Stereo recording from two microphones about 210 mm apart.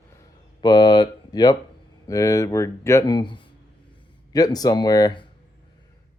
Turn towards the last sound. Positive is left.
turn(degrees=20)  # may be behind; listen again after turning